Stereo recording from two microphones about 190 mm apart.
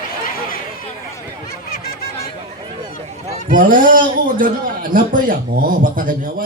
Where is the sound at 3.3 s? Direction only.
45° right (ahead or behind).